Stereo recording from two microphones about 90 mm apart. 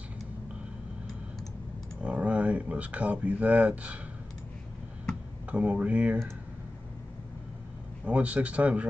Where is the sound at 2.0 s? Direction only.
15° right (ahead or behind).